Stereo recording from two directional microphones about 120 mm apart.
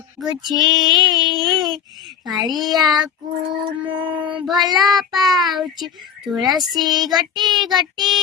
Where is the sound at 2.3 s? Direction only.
35° right (ahead or behind).